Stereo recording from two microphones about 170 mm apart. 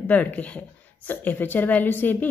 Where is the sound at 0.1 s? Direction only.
10° left (ahead or behind).